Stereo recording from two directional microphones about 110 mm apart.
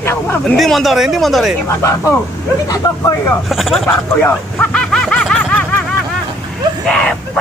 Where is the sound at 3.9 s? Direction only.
15° left (ahead or behind).